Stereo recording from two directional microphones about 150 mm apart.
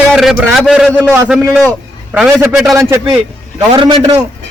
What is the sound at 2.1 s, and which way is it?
Speech, 5° right (ahead or behind).